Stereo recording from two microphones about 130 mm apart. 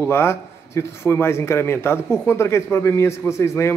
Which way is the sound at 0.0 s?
20° left (ahead or behind).